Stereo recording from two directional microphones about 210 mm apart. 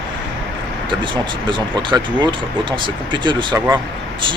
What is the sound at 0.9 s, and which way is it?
Speech, 20° right (ahead or behind).